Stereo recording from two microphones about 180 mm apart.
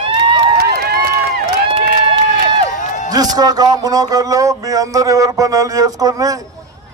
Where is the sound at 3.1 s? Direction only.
20° right (ahead or behind).